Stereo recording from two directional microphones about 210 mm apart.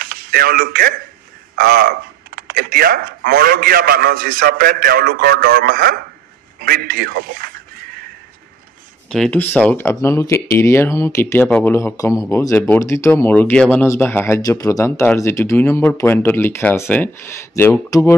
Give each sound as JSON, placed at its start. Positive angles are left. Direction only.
{"t": 0.0, "sound": "a man's voice", "side_deg": -45}
{"t": 9.1, "sound": "speech", "side_deg": 5}